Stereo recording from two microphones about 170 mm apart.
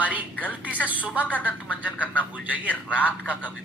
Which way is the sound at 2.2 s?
10° right (ahead or behind).